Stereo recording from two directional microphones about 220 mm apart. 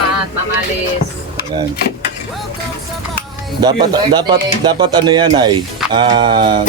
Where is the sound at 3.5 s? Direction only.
20° right (ahead or behind).